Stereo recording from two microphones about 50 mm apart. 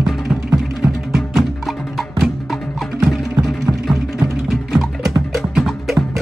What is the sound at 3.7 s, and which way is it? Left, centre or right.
Music, right.